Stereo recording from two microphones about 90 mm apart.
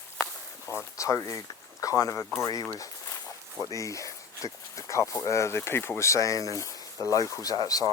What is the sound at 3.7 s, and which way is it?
Speech, 35° left (ahead or behind).